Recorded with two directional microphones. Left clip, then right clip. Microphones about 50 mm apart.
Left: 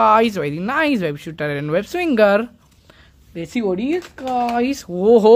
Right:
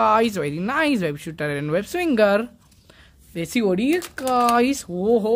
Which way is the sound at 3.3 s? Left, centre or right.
Right.